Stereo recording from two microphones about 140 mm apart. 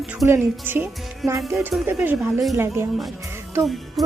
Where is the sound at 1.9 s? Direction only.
15° right (ahead or behind).